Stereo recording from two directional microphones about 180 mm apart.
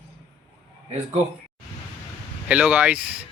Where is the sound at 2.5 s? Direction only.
5° right (ahead or behind).